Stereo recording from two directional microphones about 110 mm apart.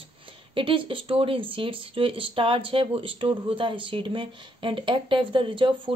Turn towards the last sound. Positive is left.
turn(degrees=-50)  # may be behind; listen again after turning